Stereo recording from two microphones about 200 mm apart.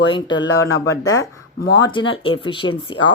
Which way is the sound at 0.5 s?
15° left (ahead or behind).